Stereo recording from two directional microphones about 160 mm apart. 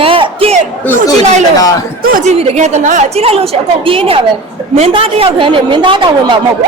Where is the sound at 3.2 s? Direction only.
40° right (ahead or behind).